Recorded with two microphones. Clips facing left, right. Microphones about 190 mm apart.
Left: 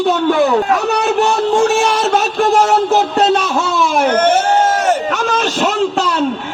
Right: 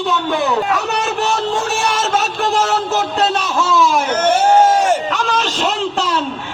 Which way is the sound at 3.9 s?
55° left (ahead or behind).